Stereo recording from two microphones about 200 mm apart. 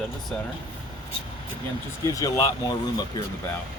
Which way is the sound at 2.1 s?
20° left (ahead or behind).